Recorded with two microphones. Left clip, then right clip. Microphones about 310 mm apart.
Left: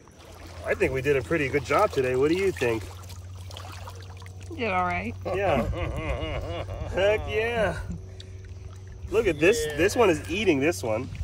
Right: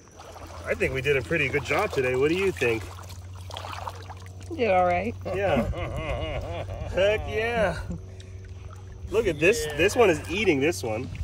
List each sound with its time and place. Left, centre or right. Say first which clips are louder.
0.7 s speech: left 1 dB; centre
3.5 s a sound: right 6 dB; right
4.6 s speech: right 5 dB; centre
9.1 s speech: left 1 dB; centre